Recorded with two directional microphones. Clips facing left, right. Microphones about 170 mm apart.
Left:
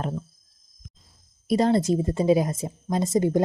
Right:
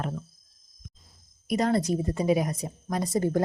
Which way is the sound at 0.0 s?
25° left (ahead or behind).